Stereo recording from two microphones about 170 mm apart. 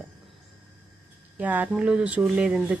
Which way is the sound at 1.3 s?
10° right (ahead or behind).